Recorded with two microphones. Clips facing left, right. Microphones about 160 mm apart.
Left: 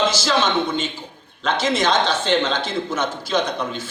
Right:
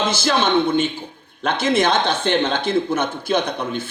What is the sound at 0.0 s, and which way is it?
A man's voice, 55° right (ahead or behind).